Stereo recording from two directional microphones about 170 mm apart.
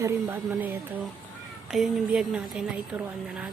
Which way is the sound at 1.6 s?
5° right (ahead or behind).